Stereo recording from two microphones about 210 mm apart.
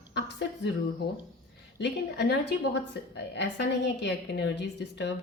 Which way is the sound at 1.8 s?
55° left (ahead or behind).